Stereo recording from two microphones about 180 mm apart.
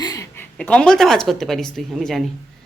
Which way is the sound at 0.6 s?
5° left (ahead or behind).